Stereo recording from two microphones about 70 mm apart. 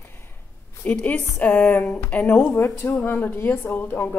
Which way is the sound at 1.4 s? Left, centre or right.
Left.